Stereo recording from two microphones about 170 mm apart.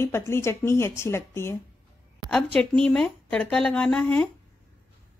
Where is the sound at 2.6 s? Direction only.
5° left (ahead or behind).